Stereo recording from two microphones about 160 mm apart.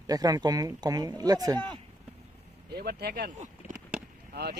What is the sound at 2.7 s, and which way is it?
Speech, 80° right.